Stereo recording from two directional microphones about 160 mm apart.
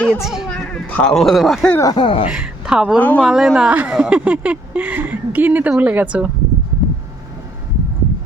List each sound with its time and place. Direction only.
0.0 s speech: centre (ahead or behind)
1.8 s speech: 25° left (ahead or behind)
2.2 s speech: 5° right (ahead or behind)
3.0 s speech: 10° left (ahead or behind)
3.2 s speech: centre (ahead or behind)